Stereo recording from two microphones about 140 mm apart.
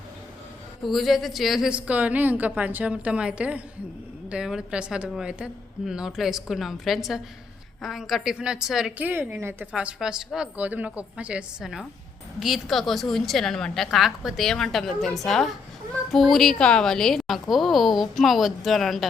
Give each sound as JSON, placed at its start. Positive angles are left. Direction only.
{"t": 0.9, "sound": "a woman's voice", "side_deg": 0}
{"t": 9.0, "sound": "a woman's voice", "side_deg": -15}
{"t": 9.7, "sound": "a woman's voice", "side_deg": -5}